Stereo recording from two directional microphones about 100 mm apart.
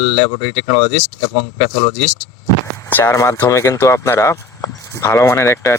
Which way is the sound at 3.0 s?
30° left (ahead or behind).